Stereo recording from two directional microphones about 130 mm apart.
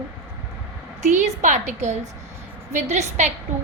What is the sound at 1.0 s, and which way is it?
A woman's voice, 65° right (ahead or behind).